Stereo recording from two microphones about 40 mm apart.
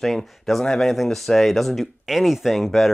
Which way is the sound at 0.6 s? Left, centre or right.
Centre.